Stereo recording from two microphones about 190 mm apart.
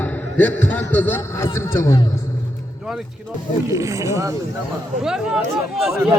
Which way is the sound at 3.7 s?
15° right (ahead or behind).